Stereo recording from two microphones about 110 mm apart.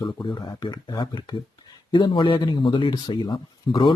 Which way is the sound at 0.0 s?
45° left (ahead or behind).